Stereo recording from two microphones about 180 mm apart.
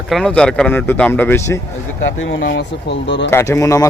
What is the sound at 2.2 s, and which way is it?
Speech, 80° left.